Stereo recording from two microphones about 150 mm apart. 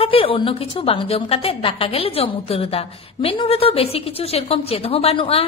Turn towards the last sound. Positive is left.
turn(degrees=40)  # may be behind; listen again after turning